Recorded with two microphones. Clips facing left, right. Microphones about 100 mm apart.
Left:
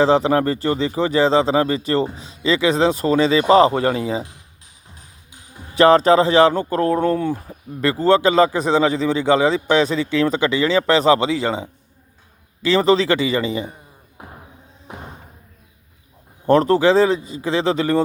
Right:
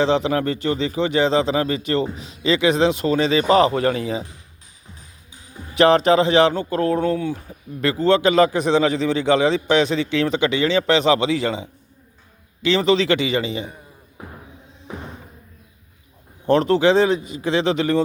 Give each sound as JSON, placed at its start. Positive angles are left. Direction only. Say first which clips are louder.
{"t": 0.0, "sound": "speech", "louder": "left 3 dB", "side_deg": 35}
{"t": 5.7, "sound": "speech", "louder": "left 2 dB", "side_deg": 35}
{"t": 16.5, "sound": "speech", "louder": "left 2 dB", "side_deg": 40}